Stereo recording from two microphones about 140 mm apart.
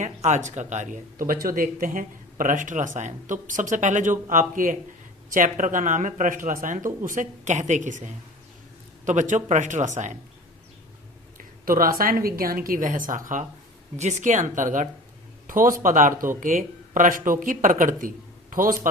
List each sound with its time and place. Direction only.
0.0 s speech: 60° right (ahead or behind)
1.3 s speech: 90° right; by 10.2 s 60° right (ahead or behind)
11.3 s a woman's voice: 85° right; by 13.4 s 70° right (ahead or behind)
13.9 s speech: 55° right (ahead or behind)
15.4 s speech: 80° right
18.5 s a woman's voice: 80° right